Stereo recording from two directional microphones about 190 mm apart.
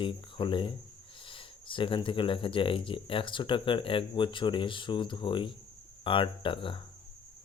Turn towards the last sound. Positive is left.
turn(degrees=25)  # may be behind; listen again after turning